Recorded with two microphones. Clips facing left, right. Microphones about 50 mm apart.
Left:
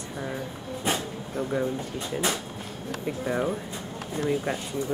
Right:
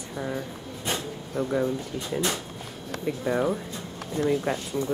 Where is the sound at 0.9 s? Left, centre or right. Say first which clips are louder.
Right 1 dB; centre.